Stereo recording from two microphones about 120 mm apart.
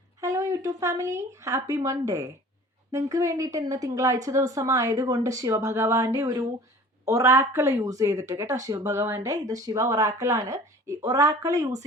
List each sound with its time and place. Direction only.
0.2 s a woman's voice: 25° right (ahead or behind)